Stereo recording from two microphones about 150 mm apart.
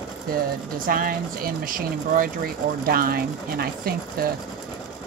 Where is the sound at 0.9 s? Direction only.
70° right (ahead or behind).